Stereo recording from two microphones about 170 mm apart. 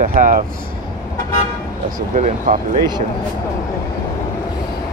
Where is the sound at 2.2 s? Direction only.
45° right (ahead or behind).